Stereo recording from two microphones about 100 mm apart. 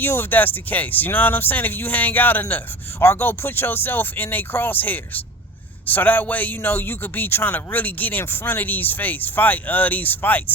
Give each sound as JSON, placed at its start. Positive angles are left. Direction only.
{"t": 0.0, "sound": "a man's voice", "side_deg": 20}